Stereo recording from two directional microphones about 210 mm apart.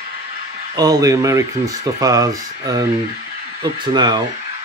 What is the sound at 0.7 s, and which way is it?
Speech, 15° right (ahead or behind).